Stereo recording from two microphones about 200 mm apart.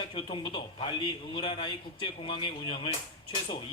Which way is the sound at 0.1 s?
25° left (ahead or behind).